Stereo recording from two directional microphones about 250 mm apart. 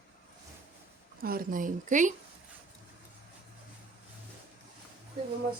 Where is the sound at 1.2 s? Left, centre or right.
Right.